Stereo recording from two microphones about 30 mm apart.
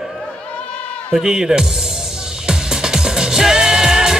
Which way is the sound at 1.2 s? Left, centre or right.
Right.